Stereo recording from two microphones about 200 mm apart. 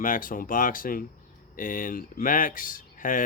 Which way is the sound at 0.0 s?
45° left (ahead or behind).